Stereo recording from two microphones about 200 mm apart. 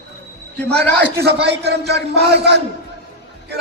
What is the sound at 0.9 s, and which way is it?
A man's voice, 55° right (ahead or behind).